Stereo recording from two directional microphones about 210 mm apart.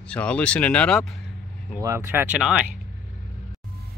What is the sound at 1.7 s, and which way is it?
Speech, 15° right (ahead or behind).